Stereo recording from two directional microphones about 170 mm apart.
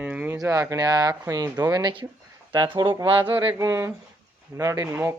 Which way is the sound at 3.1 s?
10° right (ahead or behind).